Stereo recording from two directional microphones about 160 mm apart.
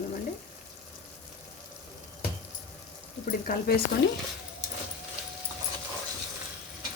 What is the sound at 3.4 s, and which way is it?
Speech, 65° left (ahead or behind).